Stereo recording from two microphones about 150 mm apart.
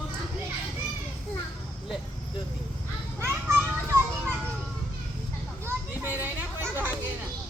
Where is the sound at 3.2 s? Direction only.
15° right (ahead or behind).